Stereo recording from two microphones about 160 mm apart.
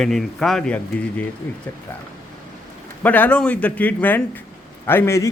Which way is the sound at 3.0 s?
10° left (ahead or behind).